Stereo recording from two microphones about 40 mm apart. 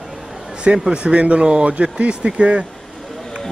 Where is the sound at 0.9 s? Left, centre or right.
Right.